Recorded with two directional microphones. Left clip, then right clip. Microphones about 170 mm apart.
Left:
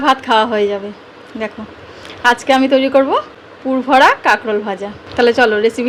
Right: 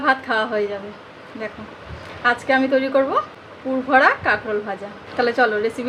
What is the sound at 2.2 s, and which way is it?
A woman's voice, 45° left (ahead or behind).